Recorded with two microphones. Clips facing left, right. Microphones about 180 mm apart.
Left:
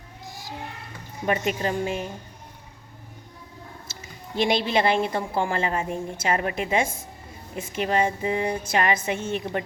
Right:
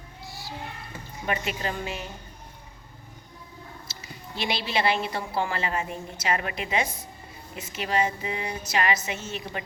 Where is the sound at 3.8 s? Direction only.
50° left (ahead or behind).